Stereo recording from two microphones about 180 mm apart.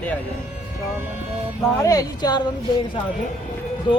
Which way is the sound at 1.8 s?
20° left (ahead or behind).